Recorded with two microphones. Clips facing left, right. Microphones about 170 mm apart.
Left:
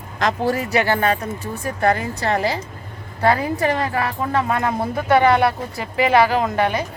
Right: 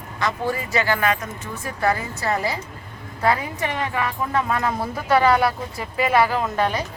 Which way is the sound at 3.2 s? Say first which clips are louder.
Left 4 dB; 30° left (ahead or behind).